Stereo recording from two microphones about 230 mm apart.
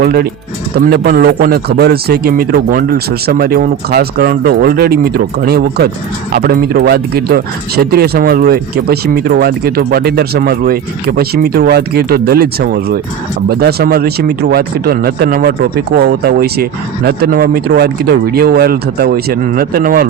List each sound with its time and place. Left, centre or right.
0.0 s a man's voice: right